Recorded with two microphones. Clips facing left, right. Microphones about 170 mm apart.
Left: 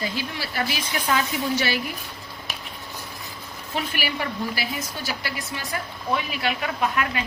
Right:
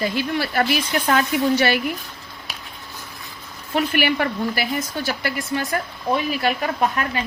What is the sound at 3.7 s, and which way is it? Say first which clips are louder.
A woman's voice: right 8 dB; 60° right (ahead or behind).